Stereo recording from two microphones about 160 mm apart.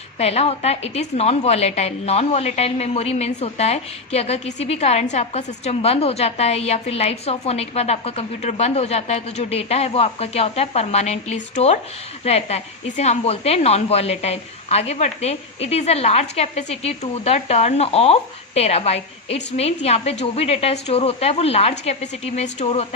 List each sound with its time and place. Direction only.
0.2 s a woman's voice: 40° left (ahead or behind)